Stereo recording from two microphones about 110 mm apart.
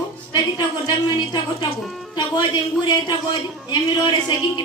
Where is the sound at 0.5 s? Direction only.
40° left (ahead or behind).